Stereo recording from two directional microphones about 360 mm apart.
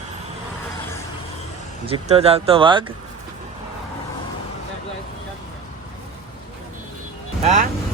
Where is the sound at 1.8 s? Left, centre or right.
Centre.